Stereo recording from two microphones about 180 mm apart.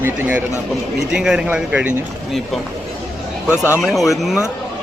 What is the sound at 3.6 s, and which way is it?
Speech, 5° right (ahead or behind).